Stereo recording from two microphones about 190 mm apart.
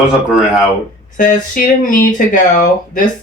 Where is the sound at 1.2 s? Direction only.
45° left (ahead or behind).